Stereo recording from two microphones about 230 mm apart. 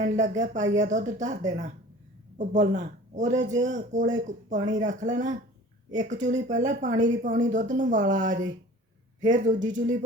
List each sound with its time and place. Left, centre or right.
0.0 s speech: right